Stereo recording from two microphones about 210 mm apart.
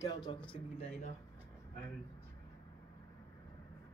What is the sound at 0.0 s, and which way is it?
Speech, 20° left (ahead or behind).